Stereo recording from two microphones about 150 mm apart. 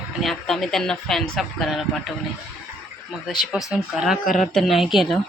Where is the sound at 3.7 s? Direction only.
Centre (ahead or behind).